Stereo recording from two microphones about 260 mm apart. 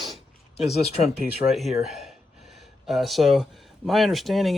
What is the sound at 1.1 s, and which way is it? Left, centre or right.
Speech, centre.